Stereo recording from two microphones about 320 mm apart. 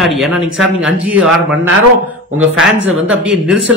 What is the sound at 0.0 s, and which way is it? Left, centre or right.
Speech, centre.